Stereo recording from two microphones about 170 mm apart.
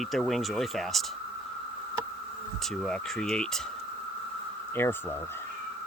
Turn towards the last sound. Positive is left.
turn(degrees=15)  # may be behind; listen again after turning